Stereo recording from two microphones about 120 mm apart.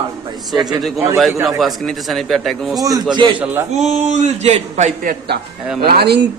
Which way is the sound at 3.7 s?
70° right (ahead or behind).